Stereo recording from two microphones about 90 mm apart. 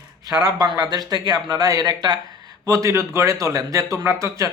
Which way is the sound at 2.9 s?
30° right (ahead or behind).